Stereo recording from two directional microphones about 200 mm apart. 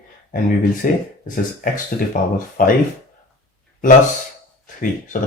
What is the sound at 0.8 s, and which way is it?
Speech, 45° left (ahead or behind).